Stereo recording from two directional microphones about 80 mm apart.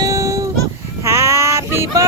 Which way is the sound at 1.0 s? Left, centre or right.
Right.